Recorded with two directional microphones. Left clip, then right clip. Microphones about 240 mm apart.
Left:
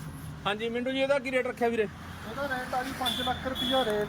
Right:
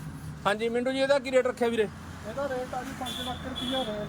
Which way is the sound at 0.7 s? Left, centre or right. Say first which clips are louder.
Even; centre.